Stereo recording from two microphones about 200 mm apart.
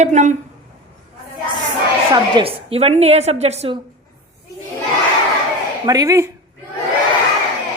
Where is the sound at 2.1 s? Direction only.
25° right (ahead or behind).